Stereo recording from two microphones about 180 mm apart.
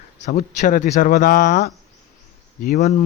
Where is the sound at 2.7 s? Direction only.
40° left (ahead or behind).